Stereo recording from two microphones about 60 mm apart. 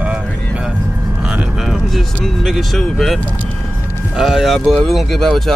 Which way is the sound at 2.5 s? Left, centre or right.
Centre.